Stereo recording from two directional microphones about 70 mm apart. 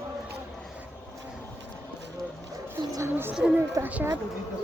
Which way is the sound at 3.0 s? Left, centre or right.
Right.